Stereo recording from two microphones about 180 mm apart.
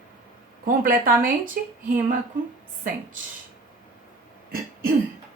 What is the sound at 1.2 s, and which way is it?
Speech, 50° right (ahead or behind).